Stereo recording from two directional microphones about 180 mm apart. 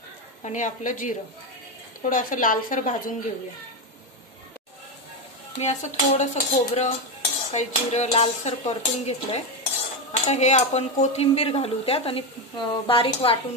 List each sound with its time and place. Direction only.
0.4 s a woman's voice: 45° left (ahead or behind)
5.6 s speech: 40° left (ahead or behind)